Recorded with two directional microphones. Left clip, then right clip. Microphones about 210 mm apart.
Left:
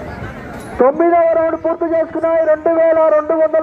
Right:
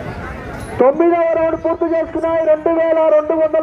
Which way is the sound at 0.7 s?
20° left (ahead or behind).